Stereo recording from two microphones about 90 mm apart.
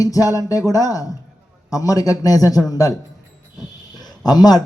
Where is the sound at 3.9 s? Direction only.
50° left (ahead or behind).